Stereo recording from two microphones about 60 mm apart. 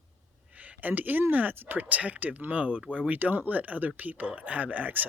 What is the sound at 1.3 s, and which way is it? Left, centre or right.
Speech, right.